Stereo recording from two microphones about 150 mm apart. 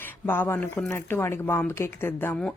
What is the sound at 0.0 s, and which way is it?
A woman's voice, 15° left (ahead or behind).